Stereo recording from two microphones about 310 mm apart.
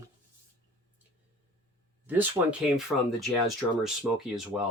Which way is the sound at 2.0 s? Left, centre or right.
Centre.